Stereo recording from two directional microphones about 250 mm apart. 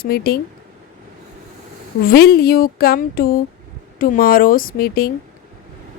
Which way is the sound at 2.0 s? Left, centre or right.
Left.